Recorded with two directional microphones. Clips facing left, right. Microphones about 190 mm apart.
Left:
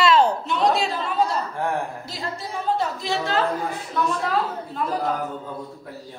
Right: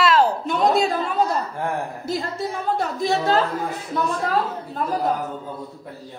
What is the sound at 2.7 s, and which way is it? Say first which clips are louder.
Speech: right 3 dB; 50° right (ahead or behind).